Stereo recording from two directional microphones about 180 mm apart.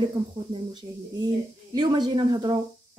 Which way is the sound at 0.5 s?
25° right (ahead or behind).